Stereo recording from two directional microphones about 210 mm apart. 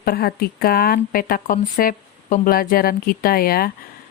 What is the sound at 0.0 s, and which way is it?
Speech, 45° left (ahead or behind).